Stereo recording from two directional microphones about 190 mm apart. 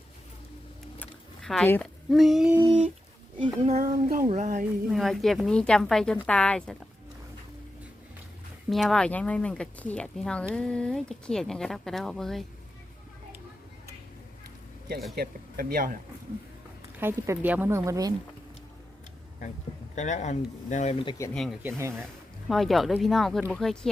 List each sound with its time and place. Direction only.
0.9 s a sound: centre (ahead or behind)
3.4 s speech: 35° right (ahead or behind)
4.9 s speech: centre (ahead or behind)
8.7 s speech: centre (ahead or behind)
15.1 s speech: 55° right (ahead or behind)
17.0 s speech: 10° right (ahead or behind)
20.0 s speech: 40° left (ahead or behind)
21.0 s speech: 25° left (ahead or behind)
21.3 s speech: centre (ahead or behind)
21.6 s speech: 15° right (ahead or behind)
22.4 s speech: centre (ahead or behind)